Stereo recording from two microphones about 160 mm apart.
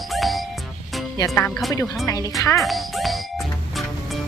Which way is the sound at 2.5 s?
Centre (ahead or behind).